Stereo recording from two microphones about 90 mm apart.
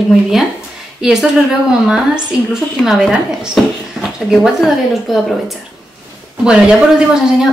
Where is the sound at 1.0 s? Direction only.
10° right (ahead or behind).